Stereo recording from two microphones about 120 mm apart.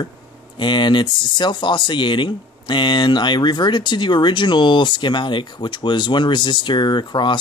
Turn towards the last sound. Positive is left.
turn(degrees=40)  # may be behind; listen again after turning